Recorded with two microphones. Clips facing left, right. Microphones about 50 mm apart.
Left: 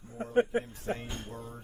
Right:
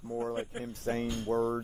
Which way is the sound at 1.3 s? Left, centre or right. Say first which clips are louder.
Right 15 dB; right.